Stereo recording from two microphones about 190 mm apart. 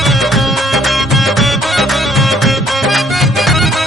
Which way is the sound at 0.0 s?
Centre (ahead or behind).